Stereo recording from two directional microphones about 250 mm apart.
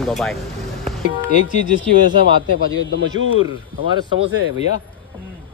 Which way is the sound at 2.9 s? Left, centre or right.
Right.